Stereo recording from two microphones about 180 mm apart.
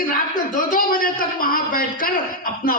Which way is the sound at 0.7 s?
50° left (ahead or behind).